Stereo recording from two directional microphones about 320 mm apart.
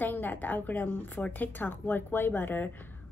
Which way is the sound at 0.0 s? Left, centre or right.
Centre.